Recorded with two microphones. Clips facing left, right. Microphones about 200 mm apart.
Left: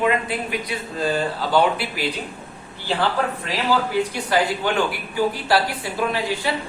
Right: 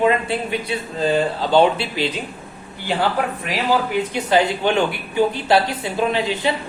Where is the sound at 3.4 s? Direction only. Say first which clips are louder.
Right 3 dB; 20° right (ahead or behind).